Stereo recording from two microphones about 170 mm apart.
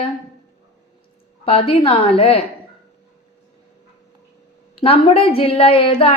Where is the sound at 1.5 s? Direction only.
35° left (ahead or behind).